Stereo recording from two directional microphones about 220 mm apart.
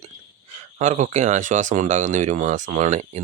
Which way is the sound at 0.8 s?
35° right (ahead or behind).